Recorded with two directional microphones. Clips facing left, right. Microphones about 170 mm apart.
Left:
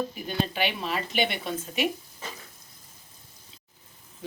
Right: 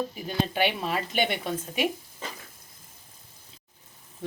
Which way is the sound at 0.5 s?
50° right (ahead or behind).